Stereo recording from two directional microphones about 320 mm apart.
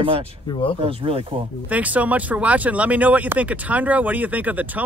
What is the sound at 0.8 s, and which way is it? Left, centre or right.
Speech, centre.